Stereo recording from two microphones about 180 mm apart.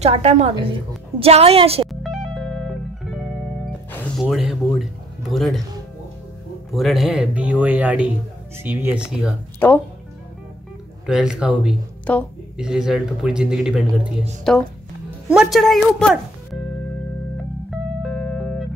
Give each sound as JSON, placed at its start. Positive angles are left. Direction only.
{"t": 0.0, "sound": "a woman's voice", "side_deg": -35}
{"t": 1.9, "sound": "music", "side_deg": 0}
{"t": 4.2, "sound": "a sound", "side_deg": 0}
{"t": 5.3, "sound": "a man's voice", "side_deg": 0}
{"t": 6.7, "sound": "a man's voice", "side_deg": 0}
{"t": 9.6, "sound": "speech", "side_deg": 10}
{"t": 11.1, "sound": "a man's voice", "side_deg": -5}
{"t": 17.6, "sound": "music", "side_deg": 5}